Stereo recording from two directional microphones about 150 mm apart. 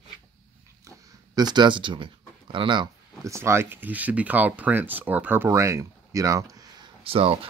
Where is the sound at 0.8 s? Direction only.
25° right (ahead or behind).